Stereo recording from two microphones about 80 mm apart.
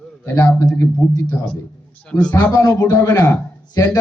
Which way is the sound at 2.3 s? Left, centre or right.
Left.